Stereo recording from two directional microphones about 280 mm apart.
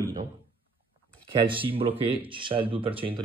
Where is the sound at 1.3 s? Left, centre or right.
Centre.